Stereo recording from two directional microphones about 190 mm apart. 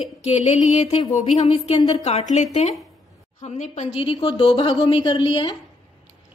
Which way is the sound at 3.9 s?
25° left (ahead or behind).